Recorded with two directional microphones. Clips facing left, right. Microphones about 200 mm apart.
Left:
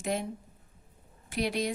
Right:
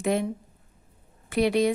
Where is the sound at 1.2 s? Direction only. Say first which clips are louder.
Right 9 dB; 60° right (ahead or behind).